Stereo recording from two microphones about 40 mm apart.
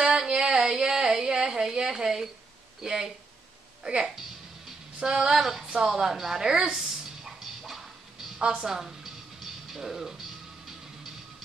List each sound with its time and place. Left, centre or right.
0.3 s a sound: right
2.8 s a woman's voice: centre
7.2 s music: centre
8.4 s a woman's voice: right
8.6 s music: centre
9.8 s a woman's voice: centre